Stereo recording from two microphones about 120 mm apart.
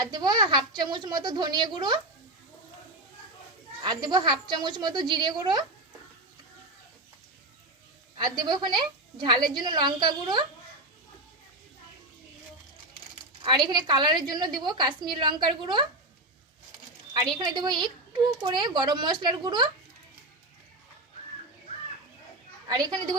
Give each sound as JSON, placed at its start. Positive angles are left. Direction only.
{"t": 0.0, "sound": "speech", "side_deg": -35}
{"t": 3.8, "sound": "speech", "side_deg": -35}
{"t": 8.2, "sound": "speech", "side_deg": -35}
{"t": 13.4, "sound": "speech", "side_deg": -40}
{"t": 17.2, "sound": "speech", "side_deg": -35}